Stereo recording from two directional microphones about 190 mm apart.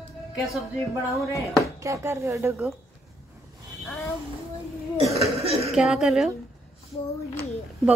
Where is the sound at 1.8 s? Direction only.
15° right (ahead or behind).